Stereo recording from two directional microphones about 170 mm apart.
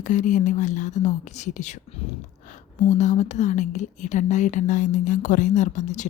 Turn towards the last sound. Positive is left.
turn(degrees=45)  # may be behind; listen again after turning